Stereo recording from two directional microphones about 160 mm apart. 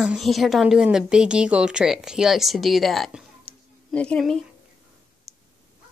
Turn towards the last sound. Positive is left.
turn(degrees=0)  # may be behind; listen again after turning